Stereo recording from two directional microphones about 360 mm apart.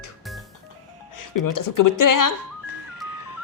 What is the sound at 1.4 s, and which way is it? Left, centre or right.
Speech, left.